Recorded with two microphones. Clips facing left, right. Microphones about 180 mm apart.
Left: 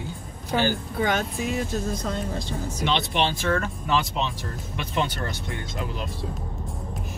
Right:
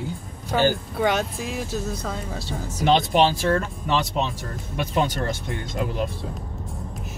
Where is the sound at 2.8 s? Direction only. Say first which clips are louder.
Right 7 dB; 45° right (ahead or behind).